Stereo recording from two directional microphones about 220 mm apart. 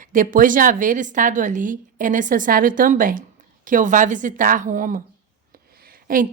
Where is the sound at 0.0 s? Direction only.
40° right (ahead or behind).